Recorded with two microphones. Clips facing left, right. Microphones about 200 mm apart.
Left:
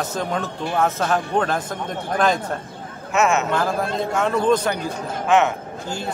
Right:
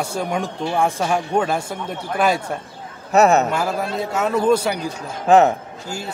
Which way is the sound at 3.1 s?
35° right (ahead or behind).